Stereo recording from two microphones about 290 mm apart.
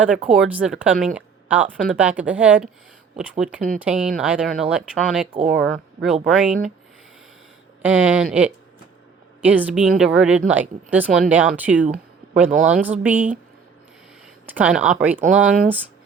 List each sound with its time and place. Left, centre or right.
0.0 s speech: centre
5.3 s speech: right
5.6 s speech: centre
7.8 s speech: centre
14.4 s speech: centre
15.4 s speech: right